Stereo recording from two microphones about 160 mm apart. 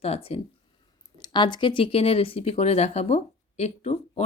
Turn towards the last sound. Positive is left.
turn(degrees=45)  # may be behind; listen again after turning